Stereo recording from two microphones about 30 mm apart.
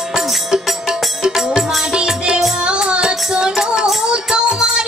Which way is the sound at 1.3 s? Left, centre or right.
Centre.